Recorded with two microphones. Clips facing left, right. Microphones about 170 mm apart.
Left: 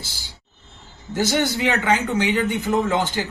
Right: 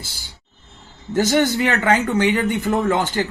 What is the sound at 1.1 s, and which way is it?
A man's voice, 45° right (ahead or behind).